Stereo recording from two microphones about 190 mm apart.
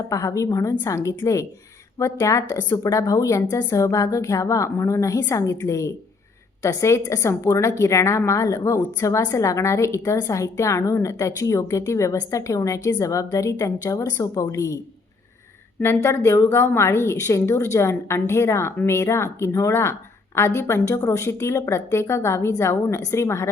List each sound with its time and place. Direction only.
0.1 s a woman's voice: 15° left (ahead or behind)
15.8 s a woman's voice: 10° left (ahead or behind)